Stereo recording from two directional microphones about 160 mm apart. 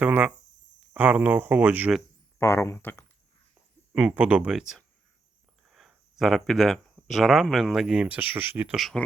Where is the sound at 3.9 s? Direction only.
5° right (ahead or behind).